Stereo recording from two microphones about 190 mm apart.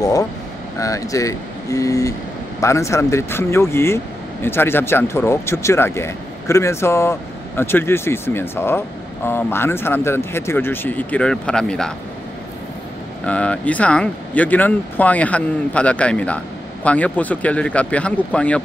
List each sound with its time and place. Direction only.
0.0 s speech: 20° left (ahead or behind); by 11.9 s 5° left (ahead or behind)
13.2 s speech: 5° left (ahead or behind)